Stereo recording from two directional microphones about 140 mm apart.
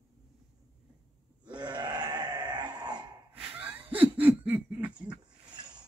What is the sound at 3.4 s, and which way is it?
Laughter, 10° right (ahead or behind).